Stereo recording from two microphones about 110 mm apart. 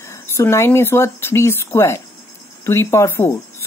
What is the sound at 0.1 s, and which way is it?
Speech, 25° left (ahead or behind).